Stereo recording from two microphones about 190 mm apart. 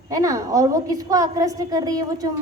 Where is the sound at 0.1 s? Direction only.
15° right (ahead or behind).